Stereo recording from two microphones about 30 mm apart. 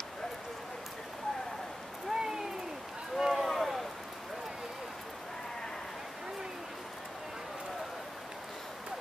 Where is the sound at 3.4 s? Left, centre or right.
Centre.